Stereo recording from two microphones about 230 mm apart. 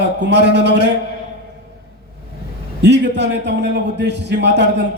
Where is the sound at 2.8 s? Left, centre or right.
Right.